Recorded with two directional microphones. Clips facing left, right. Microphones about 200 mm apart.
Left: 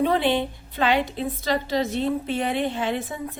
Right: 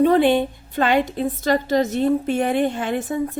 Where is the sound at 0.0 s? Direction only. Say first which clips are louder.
Right 6 dB; 50° right (ahead or behind).